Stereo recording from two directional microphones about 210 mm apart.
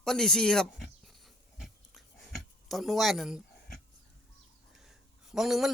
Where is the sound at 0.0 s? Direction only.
Centre (ahead or behind).